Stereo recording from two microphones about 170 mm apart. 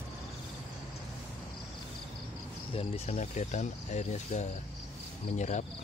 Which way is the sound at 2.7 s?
40° left (ahead or behind).